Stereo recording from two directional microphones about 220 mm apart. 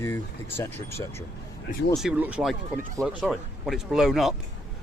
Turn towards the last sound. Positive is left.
turn(degrees=0)  # may be behind; listen again after turning